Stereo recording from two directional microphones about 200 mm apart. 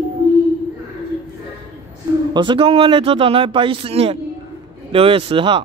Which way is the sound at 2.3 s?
25° right (ahead or behind).